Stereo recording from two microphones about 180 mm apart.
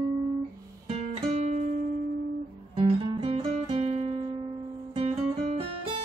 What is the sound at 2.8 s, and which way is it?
Guitar, 30° right (ahead or behind).